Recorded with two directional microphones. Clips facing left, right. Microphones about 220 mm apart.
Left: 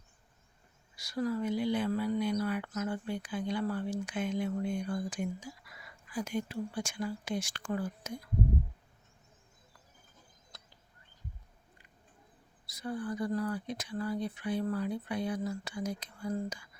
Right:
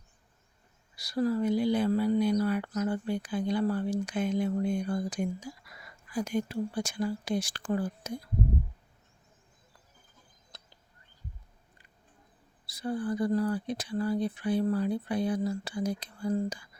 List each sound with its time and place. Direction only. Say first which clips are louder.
0.9 s speech: right 5 dB; 35° right (ahead or behind)
12.6 s speech: right 5 dB; 30° right (ahead or behind)